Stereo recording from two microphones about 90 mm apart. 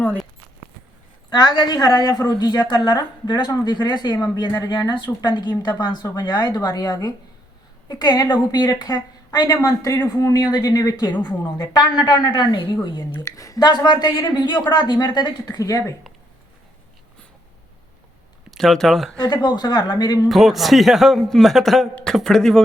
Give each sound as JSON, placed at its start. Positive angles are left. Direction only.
{"t": 1.3, "sound": "a woman's voice", "side_deg": 50}
{"t": 11.1, "sound": "a woman's voice", "side_deg": 15}
{"t": 11.5, "sound": "a woman's voice", "side_deg": 45}
{"t": 13.1, "sound": "speech", "side_deg": 40}
{"t": 13.7, "sound": "a woman's voice", "side_deg": 55}
{"t": 18.5, "sound": "speech", "side_deg": 5}
{"t": 19.3, "sound": "a woman's voice", "side_deg": 50}
{"t": 20.2, "sound": "a man's voice", "side_deg": 0}